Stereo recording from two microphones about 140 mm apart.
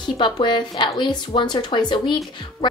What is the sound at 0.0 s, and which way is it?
A woman's voice, 35° left (ahead or behind).